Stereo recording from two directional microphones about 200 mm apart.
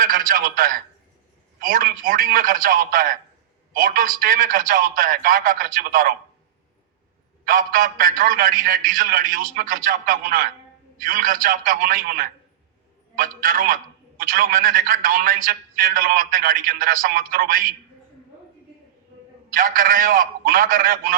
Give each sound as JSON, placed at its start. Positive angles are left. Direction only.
{"t": 0.0, "sound": "a man's voice", "side_deg": -45}
{"t": 7.4, "sound": "a man's voice", "side_deg": -45}
{"t": 19.5, "sound": "a man's voice", "side_deg": -45}